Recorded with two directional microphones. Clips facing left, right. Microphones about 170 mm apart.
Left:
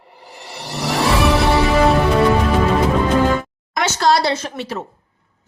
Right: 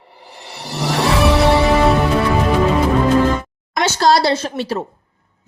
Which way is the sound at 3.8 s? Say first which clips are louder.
Right 2 dB; 30° right (ahead or behind).